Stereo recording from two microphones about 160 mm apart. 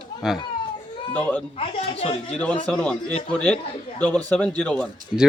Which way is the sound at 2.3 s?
10° left (ahead or behind).